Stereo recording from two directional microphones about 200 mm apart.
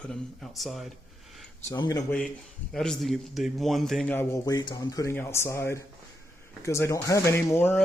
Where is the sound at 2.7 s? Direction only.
5° left (ahead or behind).